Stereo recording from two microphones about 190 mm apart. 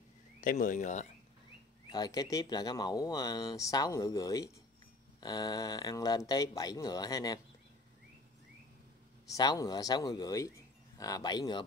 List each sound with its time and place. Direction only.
0.4 s speech: 45° left (ahead or behind)
1.9 s speech: 20° left (ahead or behind)
9.3 s speech: 20° left (ahead or behind)